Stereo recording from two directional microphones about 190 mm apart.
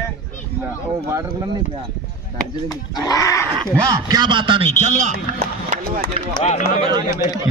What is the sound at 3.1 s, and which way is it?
Speech, 15° left (ahead or behind).